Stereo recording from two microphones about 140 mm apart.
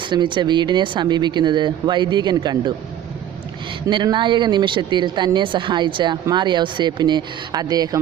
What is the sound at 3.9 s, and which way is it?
Speech, 35° right (ahead or behind).